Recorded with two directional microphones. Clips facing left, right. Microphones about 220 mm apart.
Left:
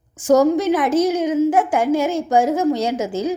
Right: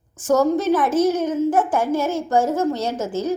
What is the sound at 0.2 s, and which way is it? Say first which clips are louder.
A woman's voice: left 3 dB; 10° left (ahead or behind).